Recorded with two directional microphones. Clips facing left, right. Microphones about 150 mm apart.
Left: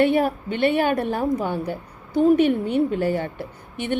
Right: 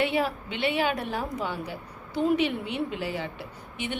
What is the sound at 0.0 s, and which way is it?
A woman's voice, 50° left (ahead or behind).